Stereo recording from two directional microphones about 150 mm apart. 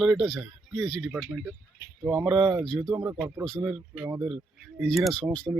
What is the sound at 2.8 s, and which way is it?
Speech, 20° right (ahead or behind).